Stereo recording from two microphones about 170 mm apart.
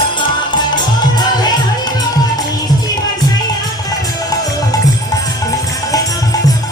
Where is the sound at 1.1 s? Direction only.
25° left (ahead or behind).